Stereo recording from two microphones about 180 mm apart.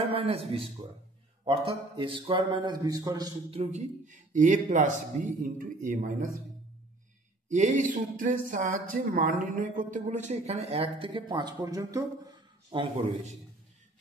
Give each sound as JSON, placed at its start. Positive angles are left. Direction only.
{"t": 0.1, "sound": "speech", "side_deg": -35}
{"t": 7.4, "sound": "speech", "side_deg": -45}
{"t": 12.7, "sound": "speech", "side_deg": -40}